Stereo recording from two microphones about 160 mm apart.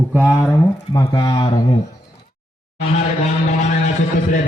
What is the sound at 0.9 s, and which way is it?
Speech, 25° left (ahead or behind).